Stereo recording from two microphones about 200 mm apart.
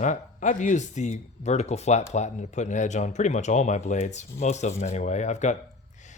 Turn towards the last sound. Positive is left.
turn(degrees=35)  # may be behind; listen again after turning